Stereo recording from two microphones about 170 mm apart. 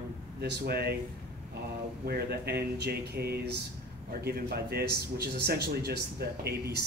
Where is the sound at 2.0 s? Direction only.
70° right (ahead or behind).